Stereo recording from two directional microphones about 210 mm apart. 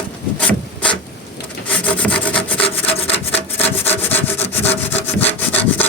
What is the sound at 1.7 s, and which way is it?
Wood, 5° left (ahead or behind).